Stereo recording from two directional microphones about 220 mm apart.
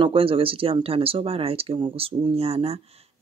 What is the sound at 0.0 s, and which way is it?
Speech, 25° right (ahead or behind).